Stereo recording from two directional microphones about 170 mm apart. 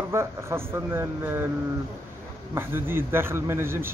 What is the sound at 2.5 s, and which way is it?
A man's voice, 15° right (ahead or behind).